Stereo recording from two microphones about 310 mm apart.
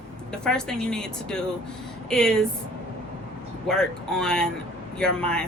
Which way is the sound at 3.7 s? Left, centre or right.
Centre.